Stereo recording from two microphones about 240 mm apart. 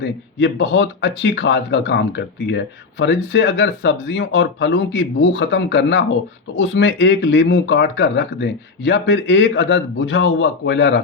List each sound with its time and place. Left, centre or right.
0.0 s speech: left